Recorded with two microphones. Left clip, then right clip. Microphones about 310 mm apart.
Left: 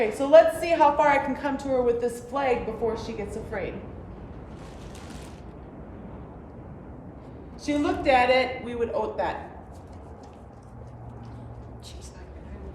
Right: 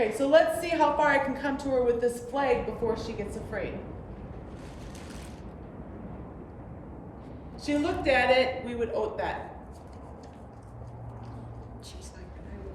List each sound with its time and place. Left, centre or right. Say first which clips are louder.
0.0 s a woman's voice: left 5 dB; left
7.6 s a woman's voice: left 3 dB; centre